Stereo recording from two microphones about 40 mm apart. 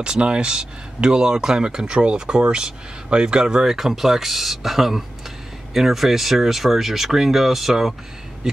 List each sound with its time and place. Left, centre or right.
0.0 s speech: right; by 7.9 s centre